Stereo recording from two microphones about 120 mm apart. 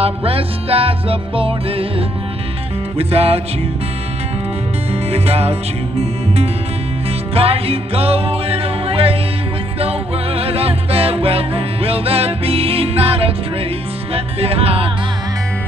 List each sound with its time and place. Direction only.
0.0 s music: 55° right (ahead or behind)
4.9 s music: 55° right (ahead or behind)